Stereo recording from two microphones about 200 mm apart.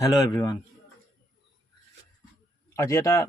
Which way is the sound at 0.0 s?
15° left (ahead or behind).